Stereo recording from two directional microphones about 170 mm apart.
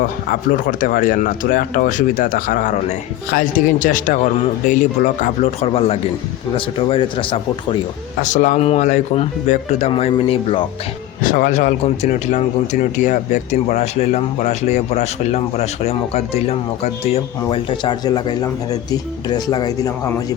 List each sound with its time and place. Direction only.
0.0 s speech: 55° left (ahead or behind); by 7.8 s 30° left (ahead or behind)
8.2 s speech: 50° left (ahead or behind)
11.2 s speech: 55° left (ahead or behind); by 20.1 s 20° left (ahead or behind)